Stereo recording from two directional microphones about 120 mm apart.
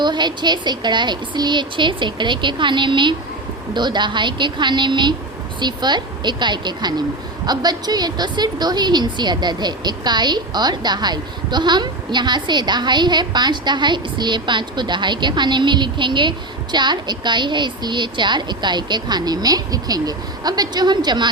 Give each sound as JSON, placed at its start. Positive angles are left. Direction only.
{"t": 0.0, "sound": "a woman's voice", "side_deg": -40}